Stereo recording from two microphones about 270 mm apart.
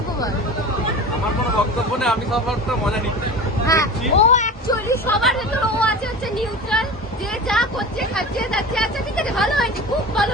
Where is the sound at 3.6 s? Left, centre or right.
Centre.